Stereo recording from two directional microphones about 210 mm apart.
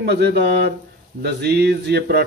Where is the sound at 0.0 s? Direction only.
50° right (ahead or behind).